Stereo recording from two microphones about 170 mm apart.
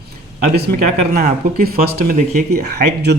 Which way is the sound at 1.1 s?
60° right (ahead or behind).